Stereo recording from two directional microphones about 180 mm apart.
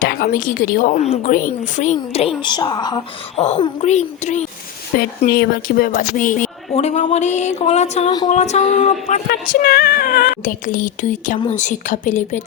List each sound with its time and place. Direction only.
0.0 s a woman's voice: 55° left (ahead or behind); by 3.0 s 20° left (ahead or behind)
3.3 s a woman's voice: 40° left (ahead or behind)
4.9 s a woman's voice: 60° left (ahead or behind); by 9.2 s 40° left (ahead or behind)
9.3 s a woman's voice: 55° left (ahead or behind)